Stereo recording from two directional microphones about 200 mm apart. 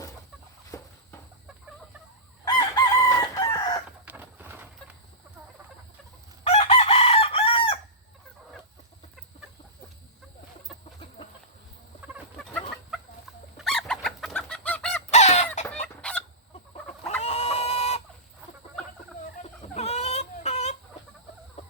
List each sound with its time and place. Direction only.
0.7 s walk: 15° left (ahead or behind)
2.4 s chicken: 20° left (ahead or behind)
3.8 s a sound: 5° right (ahead or behind)
6.4 s chicken: 30° left (ahead or behind)
13.6 s chicken: centre (ahead or behind)
15.1 s fowl: 35° left (ahead or behind)
16.0 s fowl: 5° left (ahead or behind)
17.1 s chicken: 30° left (ahead or behind)
19.4 s chicken: 35° left (ahead or behind)
21.6 s fowl: 30° left (ahead or behind)